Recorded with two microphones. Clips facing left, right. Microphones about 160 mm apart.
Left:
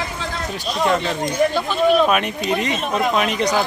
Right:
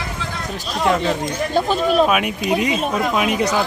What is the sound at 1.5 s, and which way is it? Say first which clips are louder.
Speech: left 1 dB; 40° right (ahead or behind).